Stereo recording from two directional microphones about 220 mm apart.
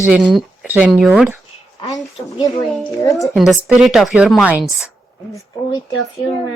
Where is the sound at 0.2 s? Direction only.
Centre (ahead or behind).